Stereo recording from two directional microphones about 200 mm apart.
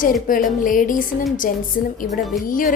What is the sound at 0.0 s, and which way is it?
A woman's voice, 45° left (ahead or behind).